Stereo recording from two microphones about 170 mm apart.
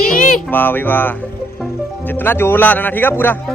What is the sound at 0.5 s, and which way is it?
Speech, 10° left (ahead or behind).